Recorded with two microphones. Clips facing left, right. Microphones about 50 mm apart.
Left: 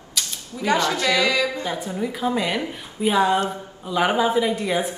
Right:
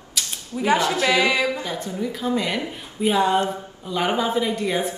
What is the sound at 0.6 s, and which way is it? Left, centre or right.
Speech, centre.